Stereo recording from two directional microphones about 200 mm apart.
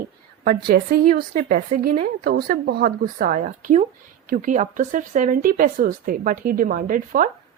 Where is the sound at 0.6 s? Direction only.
50° right (ahead or behind).